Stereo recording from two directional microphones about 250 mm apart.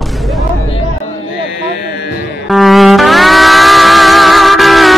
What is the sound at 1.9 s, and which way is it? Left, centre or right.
Music, left.